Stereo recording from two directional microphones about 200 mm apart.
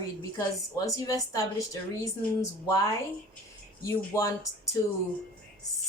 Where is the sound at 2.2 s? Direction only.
15° left (ahead or behind).